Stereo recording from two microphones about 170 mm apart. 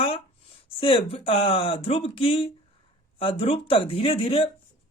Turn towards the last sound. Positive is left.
turn(degrees=35)  # may be behind; listen again after turning